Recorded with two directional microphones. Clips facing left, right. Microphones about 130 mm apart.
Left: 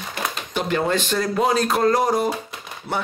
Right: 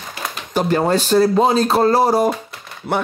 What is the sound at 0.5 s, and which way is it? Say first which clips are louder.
Speech: right 5 dB; 40° right (ahead or behind).